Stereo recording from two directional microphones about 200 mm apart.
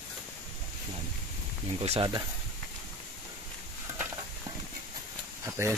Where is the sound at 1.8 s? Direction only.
30° right (ahead or behind).